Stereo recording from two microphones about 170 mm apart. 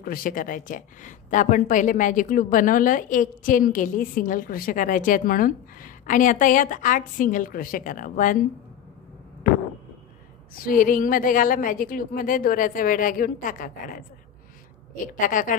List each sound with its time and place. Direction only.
0.0 s a woman's voice: 55° left (ahead or behind)
10.5 s a woman's voice: 55° left (ahead or behind)
15.2 s a woman's voice: 50° left (ahead or behind)